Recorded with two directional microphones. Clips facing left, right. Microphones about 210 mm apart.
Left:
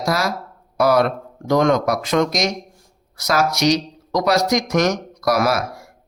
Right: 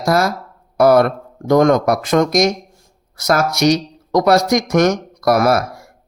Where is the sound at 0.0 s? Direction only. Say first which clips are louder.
Right 5 dB; 50° right (ahead or behind).